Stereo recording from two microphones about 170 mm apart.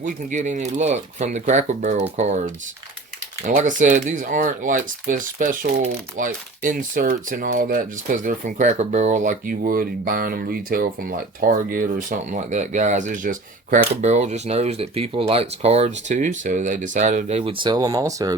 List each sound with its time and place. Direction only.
0.0 s speech: 50° right (ahead or behind); by 18.3 s 20° right (ahead or behind)